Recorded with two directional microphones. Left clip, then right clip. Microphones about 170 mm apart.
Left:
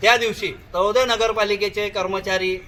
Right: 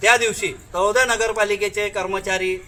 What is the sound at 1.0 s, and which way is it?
A man's voice, centre (ahead or behind).